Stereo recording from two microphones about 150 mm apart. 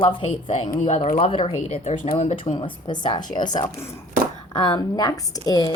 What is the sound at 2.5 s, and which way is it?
Speech, 30° left (ahead or behind).